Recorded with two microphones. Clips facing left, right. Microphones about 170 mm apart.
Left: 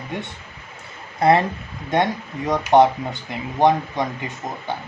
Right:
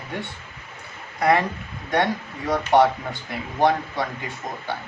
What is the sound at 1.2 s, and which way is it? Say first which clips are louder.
Speech: left 3 dB; 25° left (ahead or behind).